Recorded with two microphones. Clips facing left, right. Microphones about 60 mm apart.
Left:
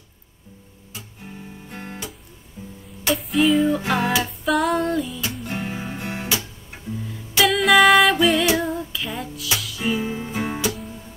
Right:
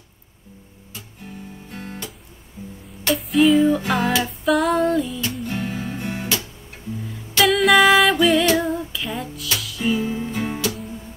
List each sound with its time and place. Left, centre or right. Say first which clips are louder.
0.9 s guitar: right 1 dB; centre
3.0 s music: right 3 dB; centre
7.1 s music: right 1 dB; centre